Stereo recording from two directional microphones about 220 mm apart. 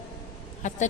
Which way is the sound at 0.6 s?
35° left (ahead or behind).